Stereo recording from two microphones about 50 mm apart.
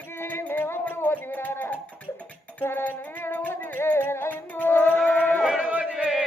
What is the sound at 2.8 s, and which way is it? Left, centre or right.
Music, left.